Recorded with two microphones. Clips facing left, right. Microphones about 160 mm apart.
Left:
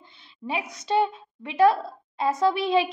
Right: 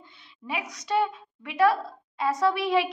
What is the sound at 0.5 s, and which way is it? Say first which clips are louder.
A woman's voice: left 3 dB; 25° left (ahead or behind).